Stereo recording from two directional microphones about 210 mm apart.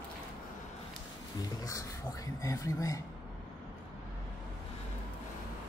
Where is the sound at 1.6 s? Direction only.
15° left (ahead or behind).